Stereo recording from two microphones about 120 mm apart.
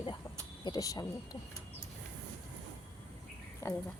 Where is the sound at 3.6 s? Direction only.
25° left (ahead or behind).